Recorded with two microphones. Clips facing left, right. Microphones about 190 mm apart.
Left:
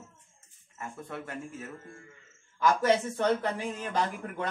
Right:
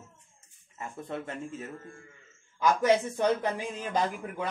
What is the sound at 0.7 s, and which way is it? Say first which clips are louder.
Speech: right 3 dB; 25° right (ahead or behind).